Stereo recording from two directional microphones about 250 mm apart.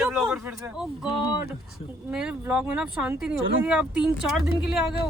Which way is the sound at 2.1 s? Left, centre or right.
Centre.